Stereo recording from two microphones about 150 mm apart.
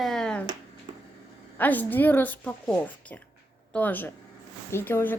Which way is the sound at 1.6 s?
10° left (ahead or behind).